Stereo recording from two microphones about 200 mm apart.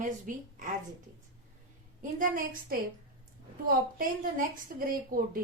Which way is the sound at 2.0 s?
40° right (ahead or behind).